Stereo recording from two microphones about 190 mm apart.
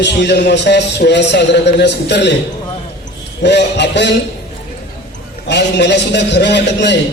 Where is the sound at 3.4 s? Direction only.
65° left (ahead or behind).